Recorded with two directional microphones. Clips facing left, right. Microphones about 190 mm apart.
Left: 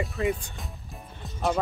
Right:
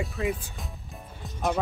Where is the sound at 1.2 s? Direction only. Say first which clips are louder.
Left 1 dB; centre (ahead or behind).